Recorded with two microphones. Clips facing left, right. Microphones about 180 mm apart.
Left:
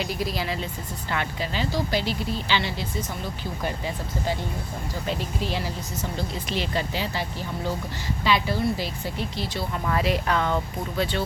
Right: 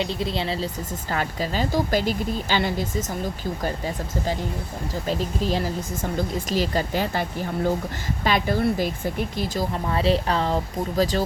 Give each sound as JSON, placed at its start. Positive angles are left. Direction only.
{"t": 0.0, "sound": "speech", "side_deg": -25}
{"t": 1.1, "sound": "speech", "side_deg": -40}
{"t": 5.0, "sound": "speech", "side_deg": -40}
{"t": 9.7, "sound": "speech", "side_deg": -30}